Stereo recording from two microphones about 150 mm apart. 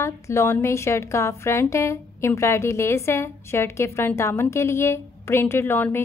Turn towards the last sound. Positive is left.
turn(degrees=15)  # may be behind; listen again after turning